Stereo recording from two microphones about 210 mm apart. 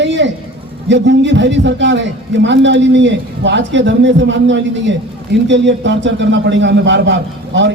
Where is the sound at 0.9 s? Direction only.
55° right (ahead or behind).